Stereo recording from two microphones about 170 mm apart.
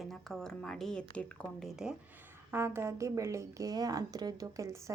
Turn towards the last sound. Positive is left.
turn(degrees=-20)  # may be behind; listen again after turning